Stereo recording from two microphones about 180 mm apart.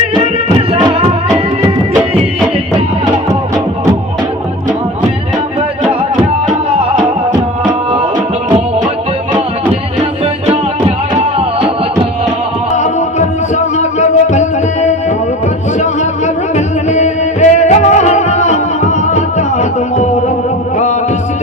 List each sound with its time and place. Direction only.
12.7 s music: 40° left (ahead or behind)